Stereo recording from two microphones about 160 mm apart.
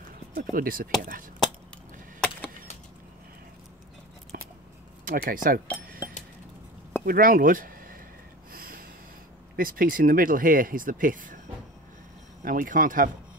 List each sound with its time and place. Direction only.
0.3 s speech: 60° right (ahead or behind)
2.1 s a sound: centre (ahead or behind)
5.0 s speech: 60° right (ahead or behind)
5.9 s chink: 65° right (ahead or behind)
7.1 s speech: 60° right (ahead or behind)
8.5 s a sound: 65° right (ahead or behind)
9.6 s speech: 60° right (ahead or behind)
12.4 s speech: 60° right (ahead or behind)